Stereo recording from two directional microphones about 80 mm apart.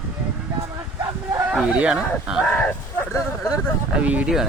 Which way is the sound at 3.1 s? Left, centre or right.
Left.